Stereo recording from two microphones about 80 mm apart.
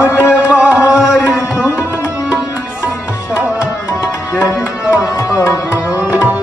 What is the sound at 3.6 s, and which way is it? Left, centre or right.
Tabla, left.